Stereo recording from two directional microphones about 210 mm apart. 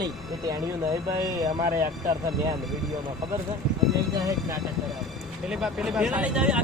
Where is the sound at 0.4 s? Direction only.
15° right (ahead or behind).